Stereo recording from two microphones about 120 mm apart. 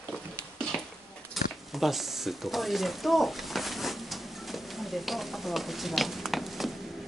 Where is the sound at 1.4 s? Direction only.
Centre (ahead or behind).